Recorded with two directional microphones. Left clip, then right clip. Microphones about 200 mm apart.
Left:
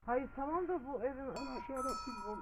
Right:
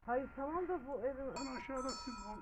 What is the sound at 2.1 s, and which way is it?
Speech, 50° right (ahead or behind).